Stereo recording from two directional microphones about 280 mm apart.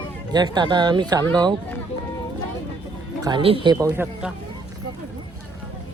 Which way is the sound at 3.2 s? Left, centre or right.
Centre.